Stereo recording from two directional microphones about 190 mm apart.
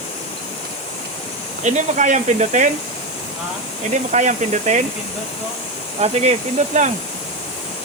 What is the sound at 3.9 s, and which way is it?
Speech, 40° right (ahead or behind).